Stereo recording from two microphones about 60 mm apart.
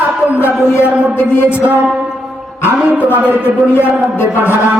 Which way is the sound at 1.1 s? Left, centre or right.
Left.